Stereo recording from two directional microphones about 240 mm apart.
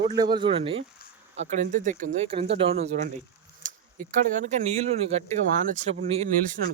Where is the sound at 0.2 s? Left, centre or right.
Centre.